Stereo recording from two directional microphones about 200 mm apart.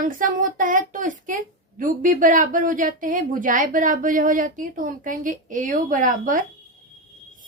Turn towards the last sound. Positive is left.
turn(degrees=-40)  # may be behind; listen again after turning